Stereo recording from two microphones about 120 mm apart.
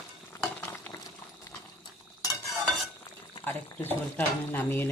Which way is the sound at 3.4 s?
15° left (ahead or behind).